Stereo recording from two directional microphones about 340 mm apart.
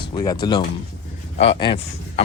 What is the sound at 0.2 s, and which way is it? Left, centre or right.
Speech, centre.